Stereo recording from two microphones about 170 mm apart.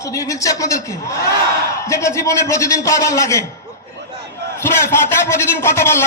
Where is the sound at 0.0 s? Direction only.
20° left (ahead or behind).